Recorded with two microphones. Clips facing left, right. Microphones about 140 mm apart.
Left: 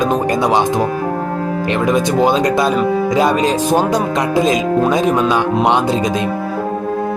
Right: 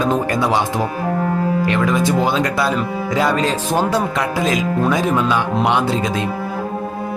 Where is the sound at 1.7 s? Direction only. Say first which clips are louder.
Left 5 dB; 20° left (ahead or behind).